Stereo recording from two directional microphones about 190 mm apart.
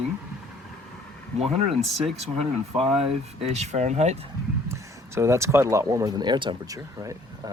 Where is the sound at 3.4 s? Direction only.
35° right (ahead or behind).